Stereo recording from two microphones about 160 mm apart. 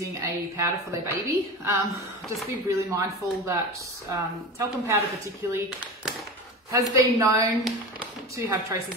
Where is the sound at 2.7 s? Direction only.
20° right (ahead or behind).